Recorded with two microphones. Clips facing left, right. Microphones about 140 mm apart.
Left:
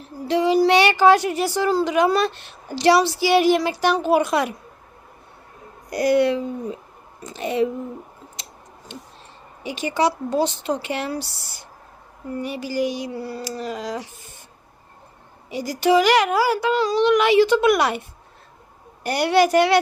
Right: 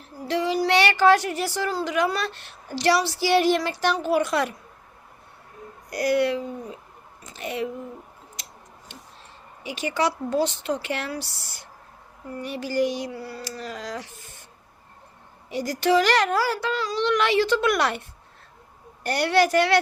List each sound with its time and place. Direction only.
0.3 s a sound: 20° left (ahead or behind)
1.8 s speech: 20° left (ahead or behind)
5.9 s speech: 25° left (ahead or behind)
8.4 s clicking: 25° left (ahead or behind)
9.6 s speech: 20° left (ahead or behind)
12.4 s speech: 10° left (ahead or behind)
13.1 s speech: 20° left (ahead or behind)
15.4 s speech: 10° left (ahead or behind)
19.0 s speech: 10° left (ahead or behind)